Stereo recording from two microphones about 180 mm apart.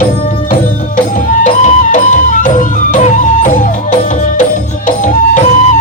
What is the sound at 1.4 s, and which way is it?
Music, 45° left (ahead or behind).